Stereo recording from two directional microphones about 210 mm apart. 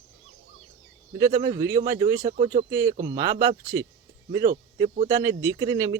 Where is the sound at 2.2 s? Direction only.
30° right (ahead or behind).